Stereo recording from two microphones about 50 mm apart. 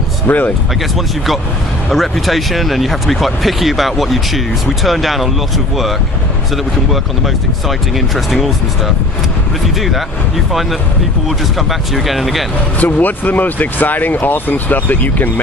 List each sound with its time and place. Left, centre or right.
0.3 s speech: left
0.9 s speech: centre
8.3 s speech: centre
11.9 s speech: centre
12.8 s speech: left